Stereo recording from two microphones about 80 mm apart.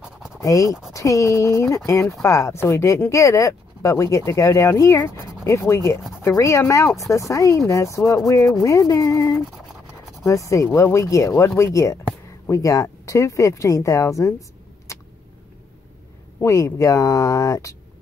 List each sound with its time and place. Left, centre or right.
0.0 s scratch: centre
0.4 s speech: left
9.3 s a sound: centre
10.2 s speech: left
14.9 s vehicle: left
16.4 s speech: left